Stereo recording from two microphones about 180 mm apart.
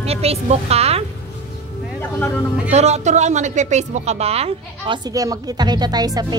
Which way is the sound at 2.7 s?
40° right (ahead or behind).